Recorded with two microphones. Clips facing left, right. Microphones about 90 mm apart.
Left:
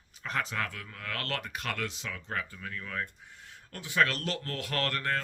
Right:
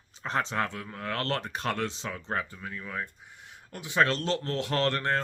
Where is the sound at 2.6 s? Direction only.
20° right (ahead or behind).